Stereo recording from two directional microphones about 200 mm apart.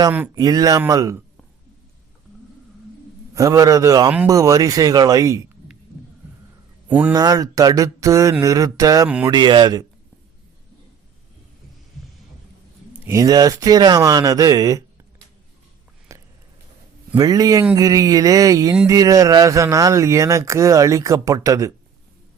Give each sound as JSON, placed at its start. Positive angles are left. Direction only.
{"t": 0.3, "sound": "speech", "side_deg": -20}
{"t": 3.3, "sound": "speech", "side_deg": -15}
{"t": 6.8, "sound": "speech", "side_deg": -10}
{"t": 7.1, "sound": "speech", "side_deg": -20}
{"t": 12.9, "sound": "speech", "side_deg": -15}
{"t": 16.1, "sound": "a sound", "side_deg": -15}
{"t": 17.2, "sound": "speech", "side_deg": -20}